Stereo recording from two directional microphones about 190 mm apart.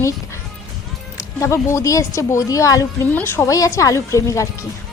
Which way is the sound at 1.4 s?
15° left (ahead or behind).